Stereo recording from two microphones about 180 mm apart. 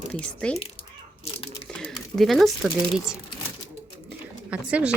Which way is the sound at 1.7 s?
5° left (ahead or behind).